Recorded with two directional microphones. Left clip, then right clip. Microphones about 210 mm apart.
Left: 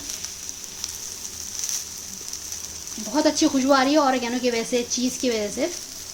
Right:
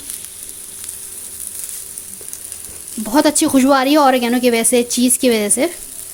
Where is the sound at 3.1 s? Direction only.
55° right (ahead or behind).